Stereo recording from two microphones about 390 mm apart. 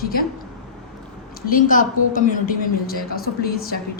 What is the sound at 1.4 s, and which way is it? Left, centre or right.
A woman's voice, left.